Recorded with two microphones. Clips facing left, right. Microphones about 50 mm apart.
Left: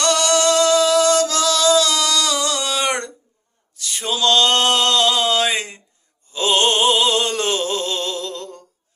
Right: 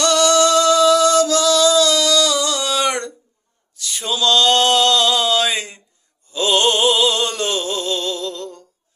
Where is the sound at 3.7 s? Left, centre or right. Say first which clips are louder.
Right 1 dB; left.